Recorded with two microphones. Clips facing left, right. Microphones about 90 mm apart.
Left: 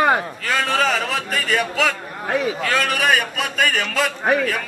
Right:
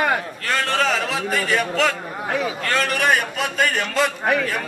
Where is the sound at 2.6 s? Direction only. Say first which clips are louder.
Right 2 dB; centre (ahead or behind).